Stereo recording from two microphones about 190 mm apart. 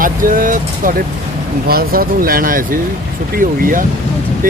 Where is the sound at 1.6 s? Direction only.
50° right (ahead or behind).